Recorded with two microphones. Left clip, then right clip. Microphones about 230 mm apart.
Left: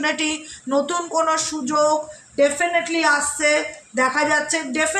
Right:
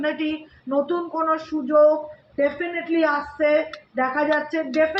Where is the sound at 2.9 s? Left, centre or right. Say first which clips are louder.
Left 2 dB; left.